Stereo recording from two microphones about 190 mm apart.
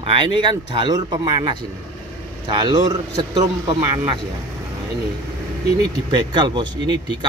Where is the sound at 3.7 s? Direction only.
25° right (ahead or behind).